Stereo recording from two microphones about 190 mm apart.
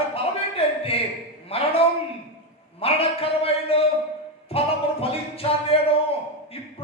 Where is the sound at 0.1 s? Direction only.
30° left (ahead or behind).